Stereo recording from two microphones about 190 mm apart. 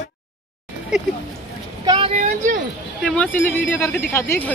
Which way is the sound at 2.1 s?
40° right (ahead or behind).